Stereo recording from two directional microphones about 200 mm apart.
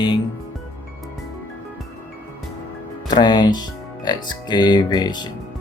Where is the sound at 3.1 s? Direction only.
20° left (ahead or behind).